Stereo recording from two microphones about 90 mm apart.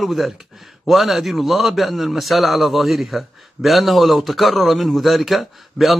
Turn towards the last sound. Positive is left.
turn(degrees=0)  # may be behind; listen again after turning